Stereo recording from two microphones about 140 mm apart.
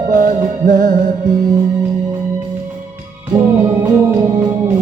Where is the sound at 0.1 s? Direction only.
75° right (ahead or behind).